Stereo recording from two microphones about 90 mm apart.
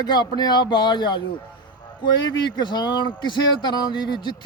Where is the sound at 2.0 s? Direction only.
55° left (ahead or behind).